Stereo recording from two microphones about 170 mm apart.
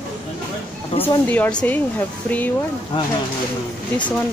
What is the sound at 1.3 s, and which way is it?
Speech, 5° left (ahead or behind).